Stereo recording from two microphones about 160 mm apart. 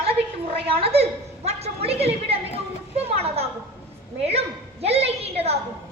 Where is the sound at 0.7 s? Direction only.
40° right (ahead or behind).